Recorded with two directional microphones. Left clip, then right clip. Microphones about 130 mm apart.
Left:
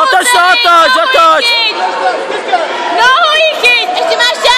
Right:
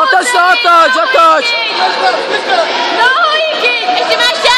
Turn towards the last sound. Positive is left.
turn(degrees=80)